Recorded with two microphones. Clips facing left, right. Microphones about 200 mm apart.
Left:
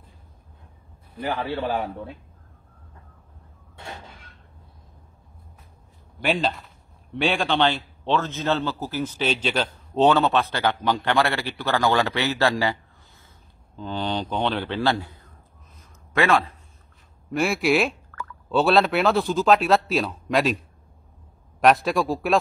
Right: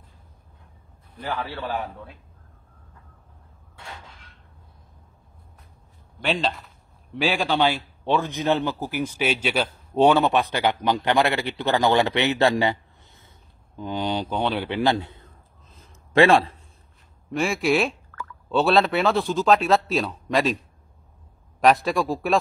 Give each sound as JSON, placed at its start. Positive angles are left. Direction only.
{"t": 1.2, "sound": "a man's voice", "side_deg": 20}
{"t": 6.2, "sound": "a man's voice", "side_deg": 0}
{"t": 13.7, "sound": "a man's voice", "side_deg": -10}
{"t": 15.7, "sound": "a sound", "side_deg": -30}
{"t": 17.3, "sound": "speech", "side_deg": 0}